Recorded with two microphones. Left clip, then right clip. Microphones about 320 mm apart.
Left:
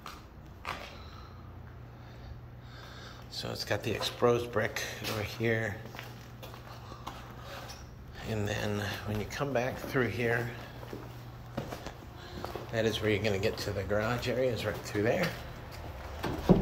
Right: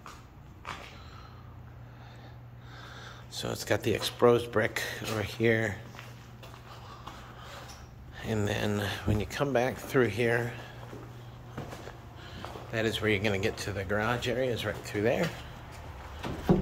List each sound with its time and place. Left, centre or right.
3.0 s speech: centre
8.3 s speech: centre
11.6 s a sound: left
12.7 s speech: centre